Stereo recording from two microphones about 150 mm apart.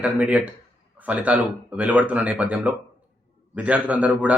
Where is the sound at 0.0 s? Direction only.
10° right (ahead or behind).